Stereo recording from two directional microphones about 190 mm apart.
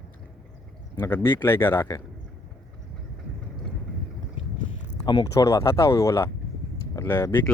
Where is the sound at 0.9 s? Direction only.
15° left (ahead or behind).